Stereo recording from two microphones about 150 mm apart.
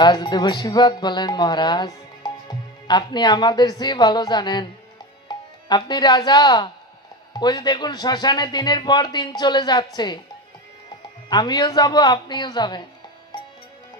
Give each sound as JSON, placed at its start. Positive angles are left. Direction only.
{"t": 0.0, "sound": "speech", "side_deg": 30}
{"t": 11.2, "sound": "speech", "side_deg": 30}